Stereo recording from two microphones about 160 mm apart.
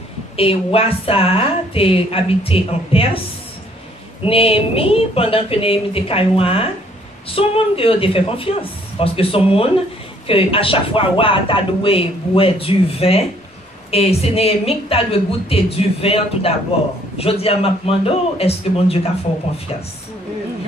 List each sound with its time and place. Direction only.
0.4 s speech: 35° left (ahead or behind)
4.2 s speech: 35° left (ahead or behind)